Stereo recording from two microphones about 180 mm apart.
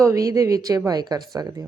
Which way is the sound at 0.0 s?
15° right (ahead or behind).